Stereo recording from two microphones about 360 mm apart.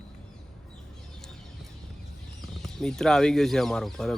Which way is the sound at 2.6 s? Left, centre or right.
Centre.